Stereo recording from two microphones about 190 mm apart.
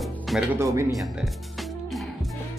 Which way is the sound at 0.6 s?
15° right (ahead or behind).